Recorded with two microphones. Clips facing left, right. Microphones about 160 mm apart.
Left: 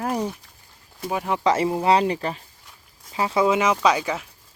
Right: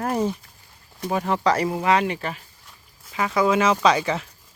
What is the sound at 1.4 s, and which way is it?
Speech, 20° left (ahead or behind).